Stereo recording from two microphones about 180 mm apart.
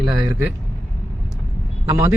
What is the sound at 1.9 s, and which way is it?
Speech, 15° right (ahead or behind).